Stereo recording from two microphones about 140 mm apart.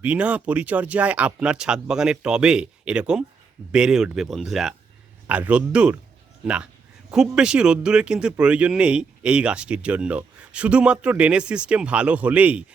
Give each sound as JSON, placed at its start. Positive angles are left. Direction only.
{"t": 0.0, "sound": "speech", "side_deg": -10}